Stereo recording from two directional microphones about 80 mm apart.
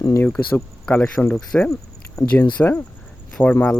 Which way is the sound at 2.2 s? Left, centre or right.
Left.